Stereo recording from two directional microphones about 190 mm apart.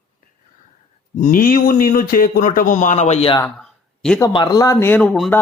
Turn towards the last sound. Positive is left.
turn(degrees=5)  # may be behind; listen again after turning